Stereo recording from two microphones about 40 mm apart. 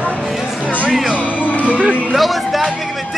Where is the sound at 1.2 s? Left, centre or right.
Left.